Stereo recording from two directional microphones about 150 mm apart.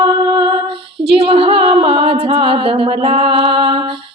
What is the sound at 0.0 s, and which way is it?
Music, 25° right (ahead or behind).